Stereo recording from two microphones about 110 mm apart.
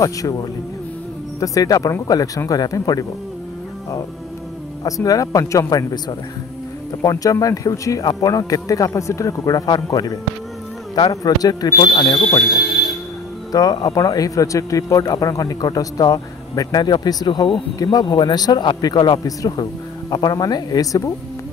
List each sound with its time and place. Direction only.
0.0 s a man's voice: 30° left (ahead or behind)
1.4 s a man's voice: 30° left (ahead or behind)
4.8 s a man's voice: 30° left (ahead or behind)
12.3 s a man's voice: 30° left (ahead or behind)